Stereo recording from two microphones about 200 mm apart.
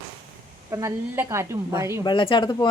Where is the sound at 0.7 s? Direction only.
15° right (ahead or behind).